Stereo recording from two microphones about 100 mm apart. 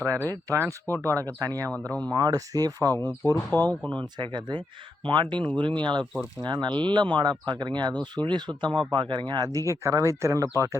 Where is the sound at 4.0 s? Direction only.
55° right (ahead or behind).